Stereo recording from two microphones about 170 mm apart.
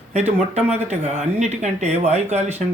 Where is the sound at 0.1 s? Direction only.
40° right (ahead or behind).